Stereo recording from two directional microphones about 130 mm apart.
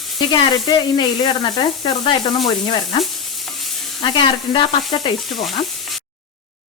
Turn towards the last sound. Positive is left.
turn(degrees=0)  # may be behind; listen again after turning